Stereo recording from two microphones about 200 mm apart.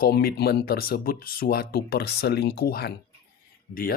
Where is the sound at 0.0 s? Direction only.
50° left (ahead or behind).